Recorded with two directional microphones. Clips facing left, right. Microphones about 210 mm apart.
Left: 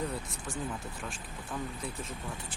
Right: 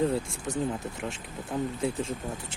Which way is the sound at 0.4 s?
40° right (ahead or behind).